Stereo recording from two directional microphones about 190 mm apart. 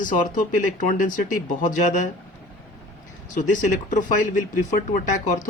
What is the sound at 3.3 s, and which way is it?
Speech, 40° left (ahead or behind).